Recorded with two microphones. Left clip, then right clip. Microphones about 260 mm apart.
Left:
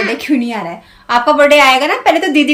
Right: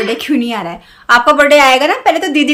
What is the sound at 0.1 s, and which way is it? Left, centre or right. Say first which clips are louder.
A woman's voice: right 1 dB; centre.